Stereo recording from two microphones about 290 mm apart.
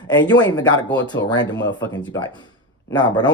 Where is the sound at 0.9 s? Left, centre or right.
Left.